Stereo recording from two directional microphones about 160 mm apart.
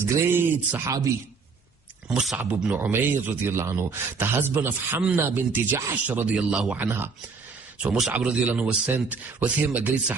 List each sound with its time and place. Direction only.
0.0 s speech: 15° right (ahead or behind)
2.0 s speech: 5° right (ahead or behind)